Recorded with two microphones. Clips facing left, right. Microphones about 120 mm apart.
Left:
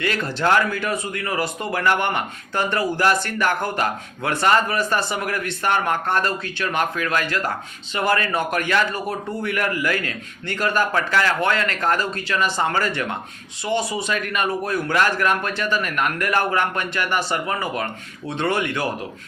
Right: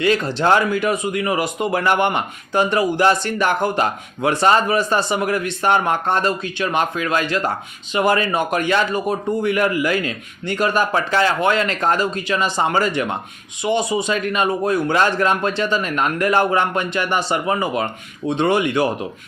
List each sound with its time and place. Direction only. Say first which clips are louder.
0.0 s a man's voice: right 5 dB; 20° right (ahead or behind)